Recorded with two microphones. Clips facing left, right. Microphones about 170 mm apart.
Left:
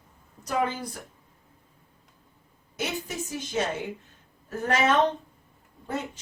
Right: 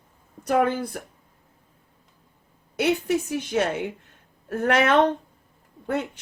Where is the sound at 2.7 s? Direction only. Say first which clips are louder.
Right 10 dB; 65° right (ahead or behind).